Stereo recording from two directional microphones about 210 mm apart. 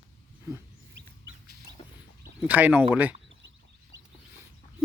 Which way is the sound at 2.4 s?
5° right (ahead or behind).